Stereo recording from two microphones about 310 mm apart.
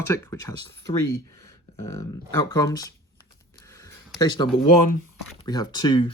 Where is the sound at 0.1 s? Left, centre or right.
Centre.